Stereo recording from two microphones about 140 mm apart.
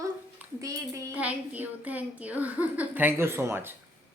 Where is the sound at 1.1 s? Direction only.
10° right (ahead or behind).